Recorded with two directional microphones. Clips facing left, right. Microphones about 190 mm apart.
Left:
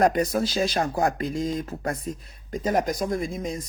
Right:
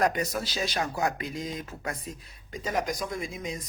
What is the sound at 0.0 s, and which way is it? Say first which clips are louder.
Speech: left 6 dB; 35° left (ahead or behind).